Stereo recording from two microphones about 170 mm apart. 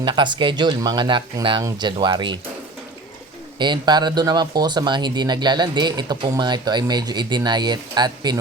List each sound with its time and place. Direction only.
0.0 s speech: 25° right (ahead or behind)
3.6 s speech: 25° right (ahead or behind)